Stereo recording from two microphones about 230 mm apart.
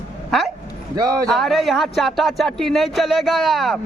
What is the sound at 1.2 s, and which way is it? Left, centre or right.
Speech, centre.